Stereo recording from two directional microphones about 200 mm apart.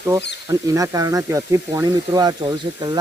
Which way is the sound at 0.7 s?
15° right (ahead or behind).